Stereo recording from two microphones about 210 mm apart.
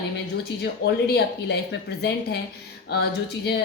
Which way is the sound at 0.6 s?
50° left (ahead or behind).